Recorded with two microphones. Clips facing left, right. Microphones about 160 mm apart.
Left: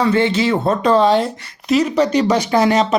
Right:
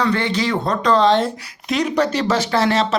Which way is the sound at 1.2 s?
Centre (ahead or behind).